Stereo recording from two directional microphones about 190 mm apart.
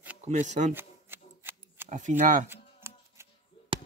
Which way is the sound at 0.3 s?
40° right (ahead or behind).